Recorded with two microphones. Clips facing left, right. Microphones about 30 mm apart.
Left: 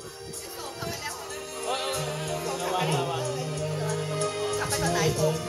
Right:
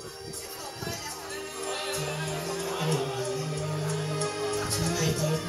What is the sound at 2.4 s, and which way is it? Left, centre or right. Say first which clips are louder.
Music: left 4 dB; left.